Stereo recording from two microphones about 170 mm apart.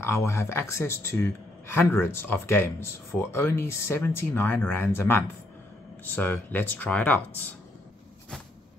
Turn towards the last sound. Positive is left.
turn(degrees=10)  # may be behind; listen again after turning